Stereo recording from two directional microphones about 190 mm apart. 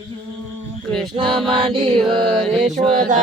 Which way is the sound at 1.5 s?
25° right (ahead or behind).